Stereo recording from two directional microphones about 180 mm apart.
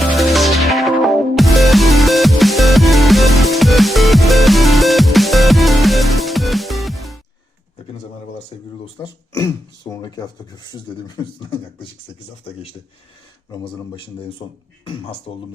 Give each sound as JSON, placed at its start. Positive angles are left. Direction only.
{"t": 0.2, "sound": "music", "side_deg": 0}
{"t": 9.4, "sound": "speech", "side_deg": 20}
{"t": 13.7, "sound": "speech", "side_deg": 30}